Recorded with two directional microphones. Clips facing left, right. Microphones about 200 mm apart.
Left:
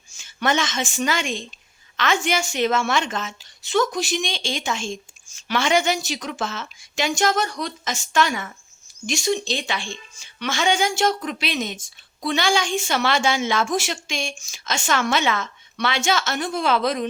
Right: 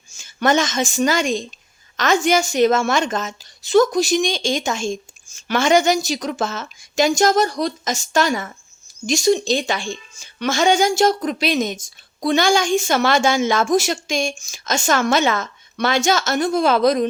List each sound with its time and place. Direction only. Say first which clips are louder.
0.1 s a woman's voice: right 5 dB; 45° right (ahead or behind)